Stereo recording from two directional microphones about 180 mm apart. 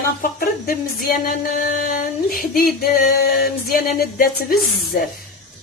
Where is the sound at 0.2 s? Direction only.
55° left (ahead or behind).